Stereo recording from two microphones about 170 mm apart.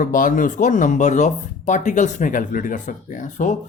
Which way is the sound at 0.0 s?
55° left (ahead or behind).